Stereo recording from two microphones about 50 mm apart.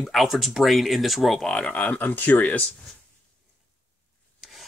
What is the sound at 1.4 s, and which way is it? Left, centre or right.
Speech, centre.